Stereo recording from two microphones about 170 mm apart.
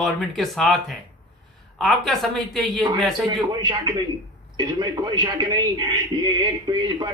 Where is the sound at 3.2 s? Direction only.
25° right (ahead or behind).